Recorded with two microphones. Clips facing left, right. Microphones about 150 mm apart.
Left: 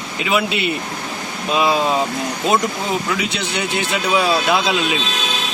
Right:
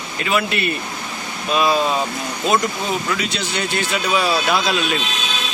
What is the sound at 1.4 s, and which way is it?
A man's voice, 20° left (ahead or behind).